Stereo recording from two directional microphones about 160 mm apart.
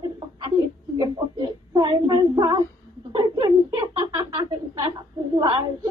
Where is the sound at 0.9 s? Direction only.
30° right (ahead or behind).